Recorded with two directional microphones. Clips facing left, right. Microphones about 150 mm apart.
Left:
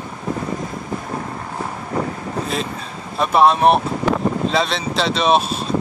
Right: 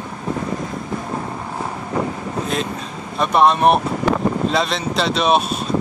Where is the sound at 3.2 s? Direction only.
Centre (ahead or behind).